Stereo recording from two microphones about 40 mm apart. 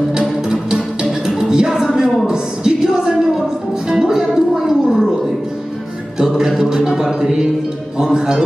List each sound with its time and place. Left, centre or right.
0.1 s music: right
2.2 s a sound: centre
3.9 s music: centre
6.1 s music: centre